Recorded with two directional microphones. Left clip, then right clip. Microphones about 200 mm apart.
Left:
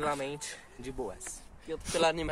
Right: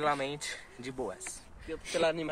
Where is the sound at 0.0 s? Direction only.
25° right (ahead or behind).